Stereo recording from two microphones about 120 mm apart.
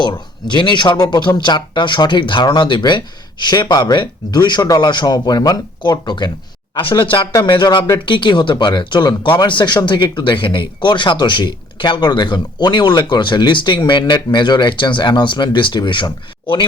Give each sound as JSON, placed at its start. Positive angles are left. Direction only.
{"t": 0.5, "sound": "speech", "side_deg": 40}
{"t": 7.3, "sound": "speech", "side_deg": 40}